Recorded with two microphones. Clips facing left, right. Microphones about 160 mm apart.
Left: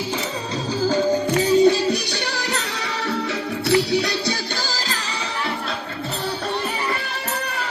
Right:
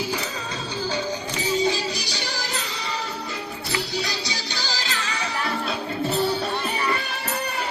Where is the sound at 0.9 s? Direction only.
50° left (ahead or behind).